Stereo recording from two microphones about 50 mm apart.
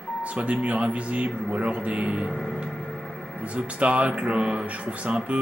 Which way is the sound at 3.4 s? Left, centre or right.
Right.